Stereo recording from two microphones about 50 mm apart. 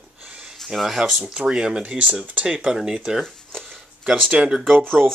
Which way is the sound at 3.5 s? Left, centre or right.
Centre.